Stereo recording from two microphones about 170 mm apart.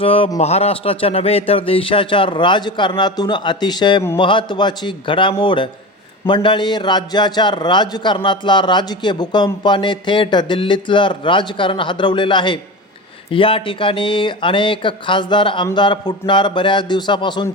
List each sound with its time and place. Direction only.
0.0 s a man's voice: 30° left (ahead or behind)